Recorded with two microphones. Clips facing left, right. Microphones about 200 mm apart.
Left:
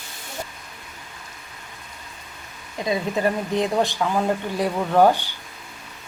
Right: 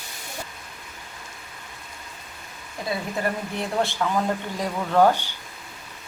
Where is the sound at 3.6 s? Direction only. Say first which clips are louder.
Left 2 dB; 15° left (ahead or behind).